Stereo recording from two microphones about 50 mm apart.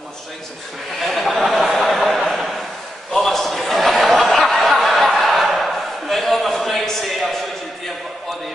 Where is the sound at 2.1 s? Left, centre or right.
Centre.